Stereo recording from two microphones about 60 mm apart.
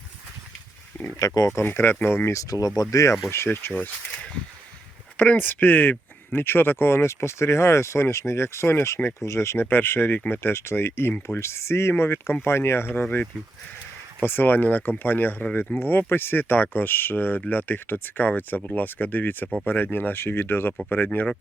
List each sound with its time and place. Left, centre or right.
1.2 s speech: left
1.6 s speech: left
2.3 s speech: left
2.9 s speech: left
3.2 s speech: left
3.7 s speech: left
9.6 s speech: left
10.2 s speech: left
10.4 s speech: left
11.3 s speech: left
12.9 s speech: left